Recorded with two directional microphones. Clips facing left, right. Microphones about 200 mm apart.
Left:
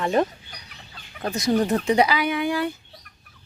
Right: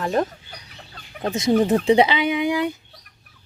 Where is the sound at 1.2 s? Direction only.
25° right (ahead or behind).